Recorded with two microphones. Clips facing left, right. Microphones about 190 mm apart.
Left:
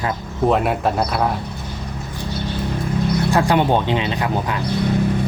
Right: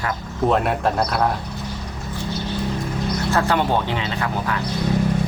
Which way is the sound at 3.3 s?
15° left (ahead or behind).